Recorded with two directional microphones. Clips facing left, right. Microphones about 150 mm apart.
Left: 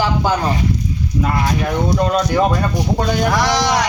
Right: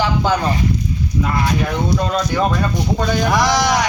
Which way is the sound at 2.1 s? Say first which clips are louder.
Left 2 dB; 10° left (ahead or behind).